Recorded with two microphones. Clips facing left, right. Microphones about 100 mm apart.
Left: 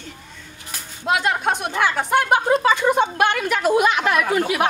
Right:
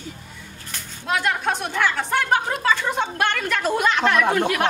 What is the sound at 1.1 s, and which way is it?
Speech, 15° left (ahead or behind).